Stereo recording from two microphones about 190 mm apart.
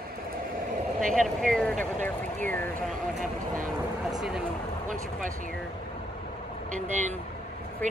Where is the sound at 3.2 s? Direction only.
45° right (ahead or behind).